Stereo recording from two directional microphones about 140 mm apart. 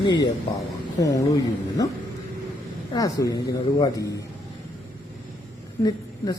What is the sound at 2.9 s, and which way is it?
Speech, 25° left (ahead or behind).